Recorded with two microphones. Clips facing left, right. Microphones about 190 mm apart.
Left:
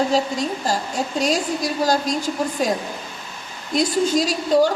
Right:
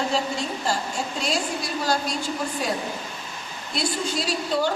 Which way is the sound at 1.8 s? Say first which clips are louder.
Left 5 dB; 40° left (ahead or behind).